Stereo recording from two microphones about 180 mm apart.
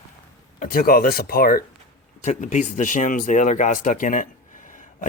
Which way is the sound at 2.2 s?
40° left (ahead or behind).